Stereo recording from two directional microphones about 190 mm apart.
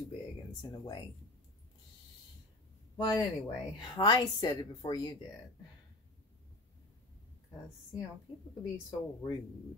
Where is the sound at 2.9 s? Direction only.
20° left (ahead or behind).